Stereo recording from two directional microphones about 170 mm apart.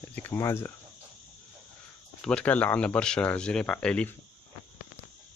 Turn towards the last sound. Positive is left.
turn(degrees=5)  # may be behind; listen again after turning